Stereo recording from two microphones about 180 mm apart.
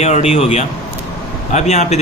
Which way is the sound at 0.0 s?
35° left (ahead or behind).